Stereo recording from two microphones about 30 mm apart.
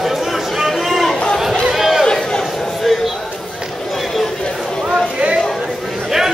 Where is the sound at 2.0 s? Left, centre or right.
Left.